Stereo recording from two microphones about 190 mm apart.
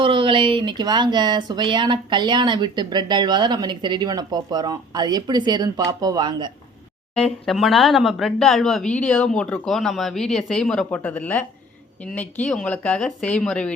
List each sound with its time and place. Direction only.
0.0 s speech: 25° right (ahead or behind)
7.2 s speech: centre (ahead or behind)